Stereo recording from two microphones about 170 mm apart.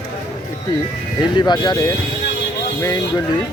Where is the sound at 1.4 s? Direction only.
25° left (ahead or behind).